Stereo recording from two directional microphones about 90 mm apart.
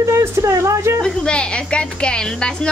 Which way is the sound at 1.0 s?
10° left (ahead or behind).